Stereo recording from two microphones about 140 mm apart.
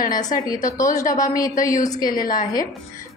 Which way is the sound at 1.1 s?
25° left (ahead or behind).